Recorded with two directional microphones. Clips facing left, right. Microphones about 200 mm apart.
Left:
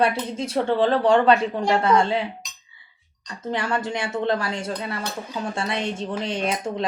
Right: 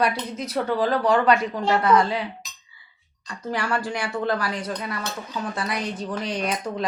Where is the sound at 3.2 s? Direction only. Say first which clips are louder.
Left 1 dB; 25° left (ahead or behind).